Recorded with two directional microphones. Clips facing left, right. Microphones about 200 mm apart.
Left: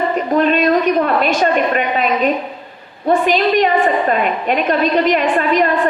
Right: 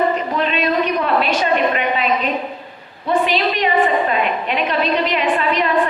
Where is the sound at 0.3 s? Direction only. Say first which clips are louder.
Left 9 dB; 45° left (ahead or behind).